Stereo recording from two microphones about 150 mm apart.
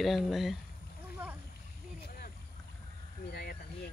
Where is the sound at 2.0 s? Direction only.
80° left.